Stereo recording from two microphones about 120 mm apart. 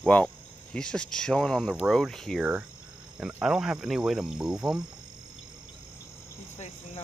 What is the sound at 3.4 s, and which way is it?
Speech, 5° right (ahead or behind).